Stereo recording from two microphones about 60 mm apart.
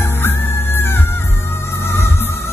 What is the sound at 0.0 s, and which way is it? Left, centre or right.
Music, left.